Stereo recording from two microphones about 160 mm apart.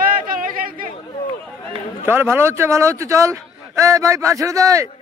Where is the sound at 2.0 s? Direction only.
15° right (ahead or behind).